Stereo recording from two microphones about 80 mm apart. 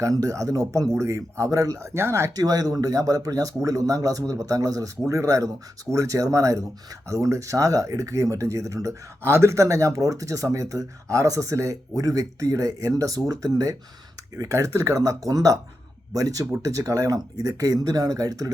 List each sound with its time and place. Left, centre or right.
0.0 s speech: right
2.4 s speech: right